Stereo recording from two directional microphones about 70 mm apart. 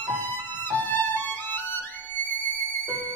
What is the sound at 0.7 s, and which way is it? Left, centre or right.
Violin, left.